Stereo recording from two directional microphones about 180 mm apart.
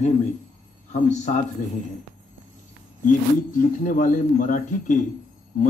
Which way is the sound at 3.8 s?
45° left (ahead or behind).